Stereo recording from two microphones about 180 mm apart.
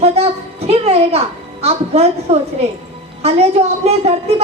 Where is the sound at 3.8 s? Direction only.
35° right (ahead or behind).